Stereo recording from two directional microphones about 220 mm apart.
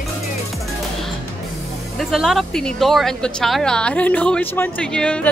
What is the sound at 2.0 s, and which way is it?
Speech, centre (ahead or behind).